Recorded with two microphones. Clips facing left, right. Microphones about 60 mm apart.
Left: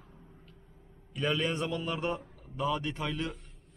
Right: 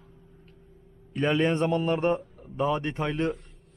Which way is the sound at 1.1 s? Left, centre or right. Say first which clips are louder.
Right 7 dB; right.